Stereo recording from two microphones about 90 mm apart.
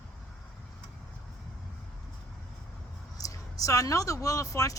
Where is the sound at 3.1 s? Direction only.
40° left (ahead or behind).